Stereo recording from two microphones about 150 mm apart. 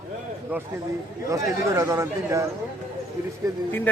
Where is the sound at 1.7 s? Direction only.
20° right (ahead or behind).